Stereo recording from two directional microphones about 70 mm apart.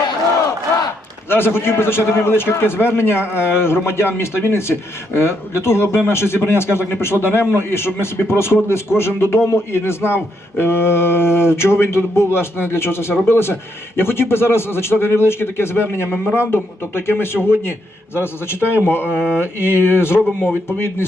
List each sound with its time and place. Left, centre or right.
1.3 s a man's voice: left